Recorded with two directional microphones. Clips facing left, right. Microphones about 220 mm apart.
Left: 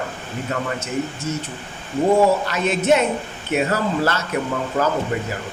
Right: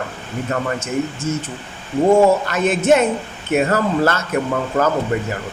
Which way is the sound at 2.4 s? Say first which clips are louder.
Right 3 dB; 50° right (ahead or behind).